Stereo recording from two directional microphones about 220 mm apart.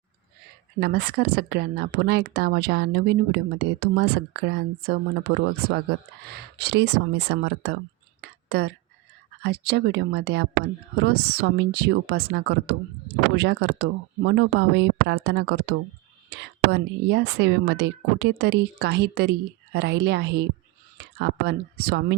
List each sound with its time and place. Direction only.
0.8 s speech: 45° right (ahead or behind)
8.2 s whispering: 50° right (ahead or behind)
9.4 s speech: 50° right (ahead or behind)